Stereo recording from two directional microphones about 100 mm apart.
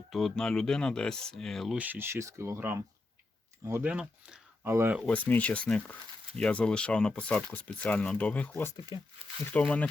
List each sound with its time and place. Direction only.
0.1 s speech: 5° left (ahead or behind)
1.7 s speech: 15° right (ahead or behind)
3.8 s speech: 10° right (ahead or behind)
4.6 s speech: 25° right (ahead or behind)
5.0 s speech: 15° left (ahead or behind)
8.9 s speech: 50° left (ahead or behind)
9.5 s speech: 15° left (ahead or behind)